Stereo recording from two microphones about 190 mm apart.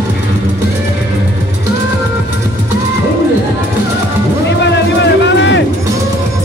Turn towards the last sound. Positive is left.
turn(degrees=65)  # may be behind; listen again after turning